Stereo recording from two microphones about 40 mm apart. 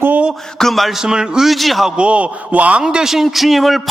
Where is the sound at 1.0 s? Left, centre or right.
Centre.